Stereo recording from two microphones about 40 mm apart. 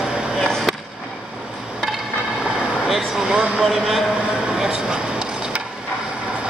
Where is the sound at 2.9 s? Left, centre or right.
Centre.